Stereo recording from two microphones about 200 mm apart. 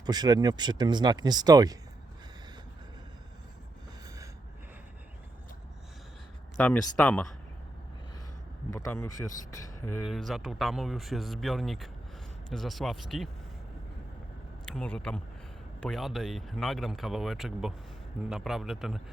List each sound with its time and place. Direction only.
0.0 s speech: 20° right (ahead or behind)
6.6 s speech: 5° left (ahead or behind)
8.7 s speech: 15° left (ahead or behind)
14.7 s speech: 5° left (ahead or behind)